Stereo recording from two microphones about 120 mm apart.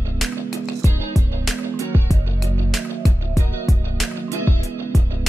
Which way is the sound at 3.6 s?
Centre (ahead or behind).